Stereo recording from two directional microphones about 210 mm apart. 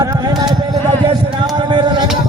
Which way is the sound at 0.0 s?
20° right (ahead or behind).